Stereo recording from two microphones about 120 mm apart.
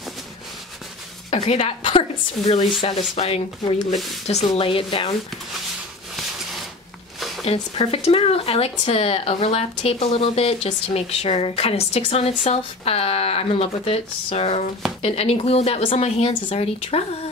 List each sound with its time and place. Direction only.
1.3 s a woman's voice: 50° left (ahead or behind)
3.9 s speech: centre (ahead or behind)
4.6 s a woman's voice: 50° left (ahead or behind)
7.2 s a sound: centre (ahead or behind)
7.7 s speech: 55° left (ahead or behind)